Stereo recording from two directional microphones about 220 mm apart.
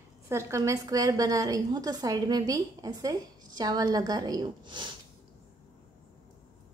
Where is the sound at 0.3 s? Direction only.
15° right (ahead or behind).